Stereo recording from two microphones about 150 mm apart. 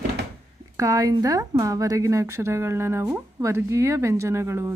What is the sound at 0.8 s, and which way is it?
Speech, 20° right (ahead or behind).